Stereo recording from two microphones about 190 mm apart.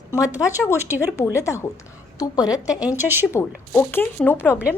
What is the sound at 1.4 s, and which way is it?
A woman's voice, 15° left (ahead or behind).